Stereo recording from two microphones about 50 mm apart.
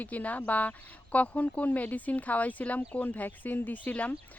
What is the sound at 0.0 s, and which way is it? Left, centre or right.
Speech, left.